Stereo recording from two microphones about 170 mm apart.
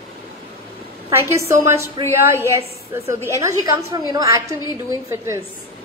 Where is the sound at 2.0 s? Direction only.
30° right (ahead or behind).